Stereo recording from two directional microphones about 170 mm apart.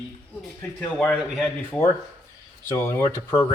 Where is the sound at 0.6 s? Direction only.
5° left (ahead or behind).